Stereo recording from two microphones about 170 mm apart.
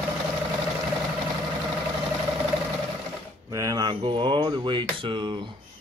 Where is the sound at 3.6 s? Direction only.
20° right (ahead or behind).